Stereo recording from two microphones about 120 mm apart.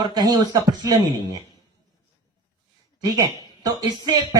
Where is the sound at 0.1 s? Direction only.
30° right (ahead or behind).